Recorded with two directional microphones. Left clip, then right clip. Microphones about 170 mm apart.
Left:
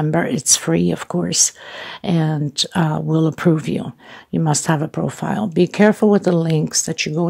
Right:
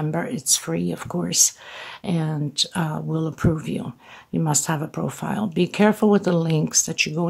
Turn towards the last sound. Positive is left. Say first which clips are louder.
# left 2 dB
turn(degrees=20)  # may be behind; listen again after turning